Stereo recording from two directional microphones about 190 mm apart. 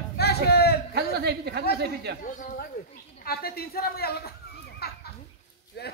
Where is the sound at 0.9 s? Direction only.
60° right (ahead or behind).